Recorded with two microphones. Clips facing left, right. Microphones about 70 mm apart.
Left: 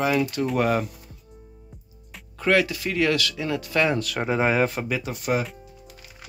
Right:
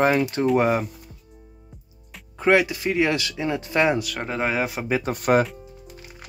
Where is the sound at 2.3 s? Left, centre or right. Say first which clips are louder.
Right 2 dB; right.